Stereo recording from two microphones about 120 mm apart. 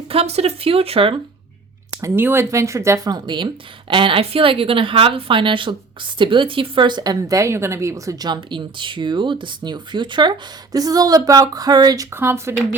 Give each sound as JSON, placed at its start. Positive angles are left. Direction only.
{"t": 0.1, "sound": "speech", "side_deg": -60}
{"t": 1.9, "sound": "speech", "side_deg": -25}
{"t": 3.1, "sound": "a woman's voice", "side_deg": -40}
{"t": 12.1, "sound": "speech", "side_deg": -20}